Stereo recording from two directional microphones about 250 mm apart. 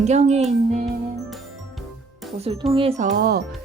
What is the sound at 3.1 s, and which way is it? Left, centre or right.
Speech, right.